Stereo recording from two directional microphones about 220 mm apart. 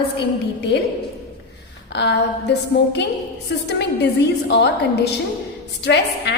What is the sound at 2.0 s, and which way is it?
A woman's voice, 50° left (ahead or behind).